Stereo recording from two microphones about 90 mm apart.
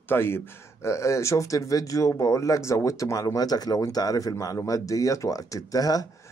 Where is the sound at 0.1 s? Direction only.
25° left (ahead or behind); by 6.0 s 45° left (ahead or behind).